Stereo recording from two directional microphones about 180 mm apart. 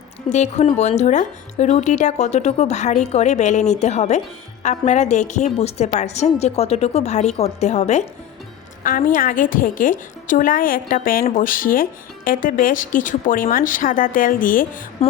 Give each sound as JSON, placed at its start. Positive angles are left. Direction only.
{"t": 0.3, "sound": "speech", "side_deg": 40}
{"t": 8.8, "sound": "a woman's voice", "side_deg": 50}